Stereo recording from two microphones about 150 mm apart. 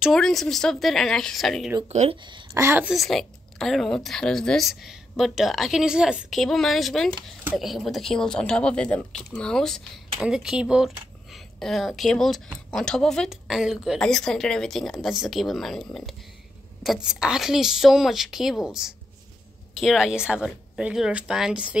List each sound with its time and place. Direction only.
0.0 s speech: centre (ahead or behind)
1.9 s speech: 45° right (ahead or behind)
2.5 s a woman's voice: 15° right (ahead or behind)
2.9 s speech: centre (ahead or behind)